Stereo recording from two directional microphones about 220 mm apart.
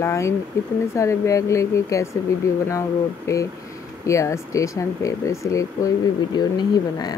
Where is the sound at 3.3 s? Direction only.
15° left (ahead or behind).